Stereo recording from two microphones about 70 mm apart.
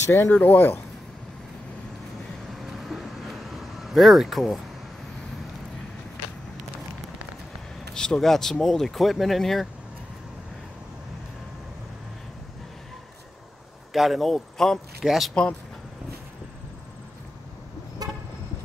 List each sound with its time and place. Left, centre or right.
0.0 s speech: left
0.3 s speech: left
2.8 s vehicle: centre
7.9 s speech: centre
13.9 s speech: centre
18.0 s vehicle: right